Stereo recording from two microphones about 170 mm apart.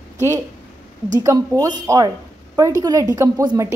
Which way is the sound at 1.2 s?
20° right (ahead or behind).